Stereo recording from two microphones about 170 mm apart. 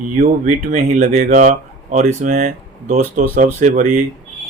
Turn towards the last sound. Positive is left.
turn(degrees=-50)  # may be behind; listen again after turning